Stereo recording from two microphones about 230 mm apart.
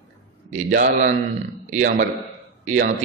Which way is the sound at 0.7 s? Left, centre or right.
Right.